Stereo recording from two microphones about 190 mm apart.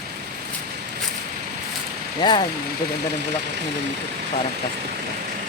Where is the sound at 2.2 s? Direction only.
25° left (ahead or behind).